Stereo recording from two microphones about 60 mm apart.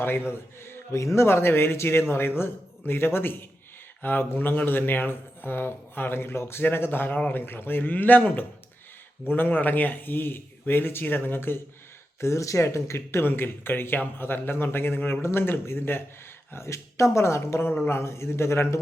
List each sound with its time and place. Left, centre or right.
0.0 s a man's voice: left
9.2 s a man's voice: left
12.2 s speech: left
13.2 s a man's voice: left